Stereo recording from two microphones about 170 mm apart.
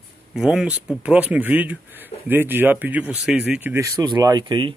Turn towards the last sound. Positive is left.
turn(degrees=-30)  # may be behind; listen again after turning